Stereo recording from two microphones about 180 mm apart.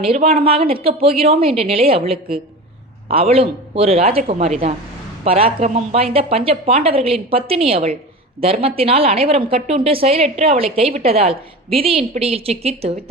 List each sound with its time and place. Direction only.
0.0 s a woman's voice: 35° right (ahead or behind)